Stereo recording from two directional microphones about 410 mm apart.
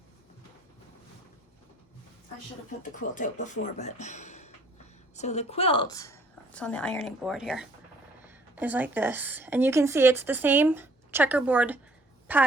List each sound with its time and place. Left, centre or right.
2.9 s a woman's voice: centre